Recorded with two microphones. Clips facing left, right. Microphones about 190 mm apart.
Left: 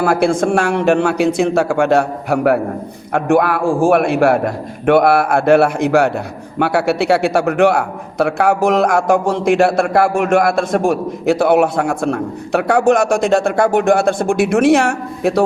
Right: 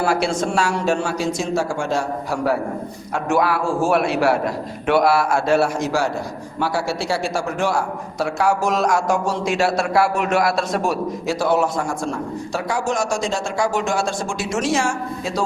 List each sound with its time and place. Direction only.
0.0 s a man's voice: 55° left (ahead or behind)